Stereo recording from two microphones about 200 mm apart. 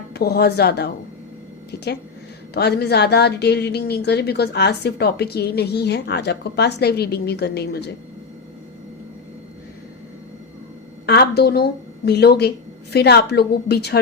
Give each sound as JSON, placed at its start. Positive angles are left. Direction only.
{"t": 0.1, "sound": "speech", "side_deg": 55}
{"t": 1.7, "sound": "a sound", "side_deg": 55}
{"t": 2.6, "sound": "speech", "side_deg": 55}
{"t": 11.0, "sound": "speech", "side_deg": 55}